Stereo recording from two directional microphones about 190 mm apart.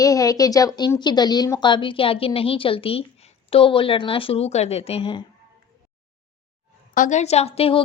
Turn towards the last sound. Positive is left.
turn(degrees=30)  # may be behind; listen again after turning